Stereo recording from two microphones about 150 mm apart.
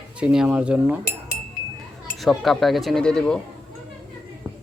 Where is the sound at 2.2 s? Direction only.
Centre (ahead or behind).